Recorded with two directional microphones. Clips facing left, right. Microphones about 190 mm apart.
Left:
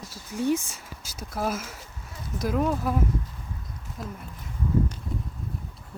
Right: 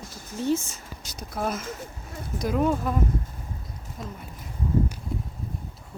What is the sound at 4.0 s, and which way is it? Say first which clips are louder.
Speech: left 1 dB; centre (ahead or behind).